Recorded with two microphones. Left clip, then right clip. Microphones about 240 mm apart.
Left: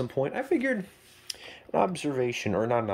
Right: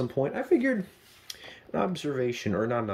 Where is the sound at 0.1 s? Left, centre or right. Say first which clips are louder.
Right 2 dB; centre.